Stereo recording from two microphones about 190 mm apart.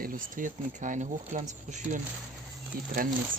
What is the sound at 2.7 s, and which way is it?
Speech, 50° right (ahead or behind).